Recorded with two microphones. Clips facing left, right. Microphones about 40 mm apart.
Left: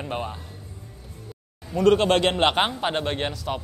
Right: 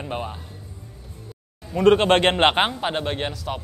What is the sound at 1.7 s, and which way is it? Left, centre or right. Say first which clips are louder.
Speech: right 2 dB; right.